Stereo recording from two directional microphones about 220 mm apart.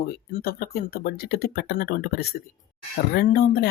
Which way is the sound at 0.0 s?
45° left (ahead or behind).